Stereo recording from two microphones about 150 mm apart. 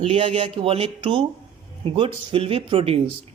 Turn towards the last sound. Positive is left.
turn(degrees=-40)  # may be behind; listen again after turning